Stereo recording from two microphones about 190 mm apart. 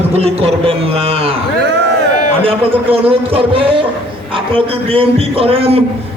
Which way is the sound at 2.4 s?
30° right (ahead or behind).